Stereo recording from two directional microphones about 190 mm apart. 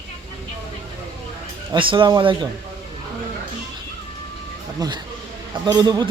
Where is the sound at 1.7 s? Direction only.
25° right (ahead or behind).